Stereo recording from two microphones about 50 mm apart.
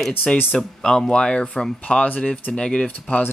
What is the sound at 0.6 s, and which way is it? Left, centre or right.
Speech, centre.